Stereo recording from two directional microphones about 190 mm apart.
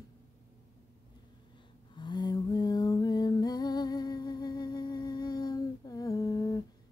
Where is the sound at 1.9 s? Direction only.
25° left (ahead or behind).